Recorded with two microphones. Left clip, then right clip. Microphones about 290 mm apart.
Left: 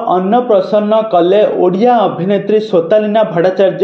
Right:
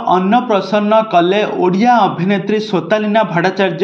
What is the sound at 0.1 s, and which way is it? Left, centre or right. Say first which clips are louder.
A man's voice: left 2 dB; right.